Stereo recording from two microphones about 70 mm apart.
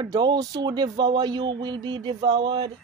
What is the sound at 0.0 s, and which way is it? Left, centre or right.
A woman's voice, right.